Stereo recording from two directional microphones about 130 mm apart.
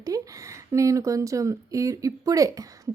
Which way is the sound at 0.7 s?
25° right (ahead or behind).